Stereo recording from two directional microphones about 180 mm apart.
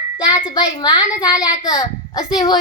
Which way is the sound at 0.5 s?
25° left (ahead or behind).